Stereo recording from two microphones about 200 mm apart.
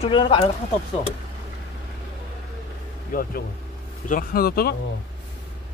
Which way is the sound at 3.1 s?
45° left (ahead or behind).